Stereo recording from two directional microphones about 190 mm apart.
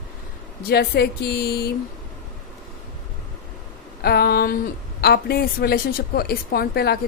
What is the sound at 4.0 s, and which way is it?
A woman's voice, 55° left (ahead or behind).